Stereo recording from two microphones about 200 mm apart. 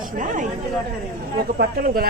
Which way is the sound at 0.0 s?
40° right (ahead or behind).